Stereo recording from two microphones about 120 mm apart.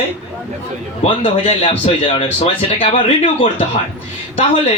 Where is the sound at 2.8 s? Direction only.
55° left (ahead or behind).